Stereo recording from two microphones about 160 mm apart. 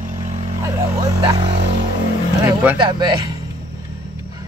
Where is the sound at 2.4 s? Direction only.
10° right (ahead or behind).